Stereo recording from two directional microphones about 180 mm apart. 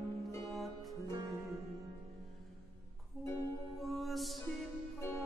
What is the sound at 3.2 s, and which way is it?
Music, 15° left (ahead or behind).